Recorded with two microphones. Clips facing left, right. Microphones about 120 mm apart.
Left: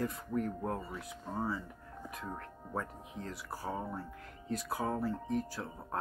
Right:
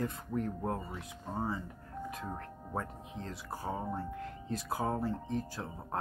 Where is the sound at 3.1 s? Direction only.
25° right (ahead or behind).